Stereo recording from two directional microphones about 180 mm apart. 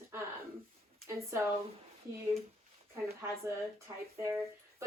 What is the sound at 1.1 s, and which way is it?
Speech, 15° right (ahead or behind).